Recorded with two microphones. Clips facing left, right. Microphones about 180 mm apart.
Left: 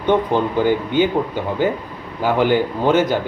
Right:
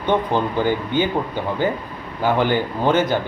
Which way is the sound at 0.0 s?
15° left (ahead or behind).